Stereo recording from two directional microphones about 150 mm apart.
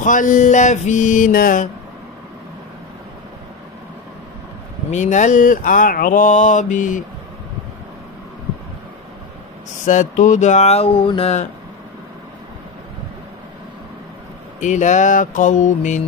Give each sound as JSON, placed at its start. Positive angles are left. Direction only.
{"t": 0.0, "sound": "mantra", "side_deg": 60}
{"t": 4.9, "sound": "mantra", "side_deg": 55}
{"t": 9.8, "sound": "speech", "side_deg": 55}
{"t": 14.6, "sound": "mantra", "side_deg": 55}